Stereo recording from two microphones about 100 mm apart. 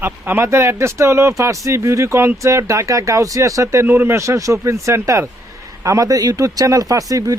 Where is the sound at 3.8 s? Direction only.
20° right (ahead or behind).